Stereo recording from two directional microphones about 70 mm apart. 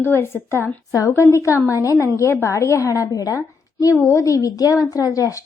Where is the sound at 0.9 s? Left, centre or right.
Left.